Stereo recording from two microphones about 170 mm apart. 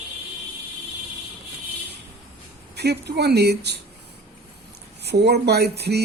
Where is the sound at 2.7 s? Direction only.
75° right (ahead or behind).